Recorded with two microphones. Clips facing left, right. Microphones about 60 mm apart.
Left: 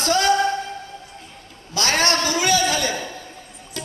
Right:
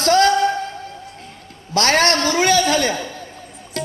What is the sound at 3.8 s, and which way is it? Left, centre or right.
Music, right.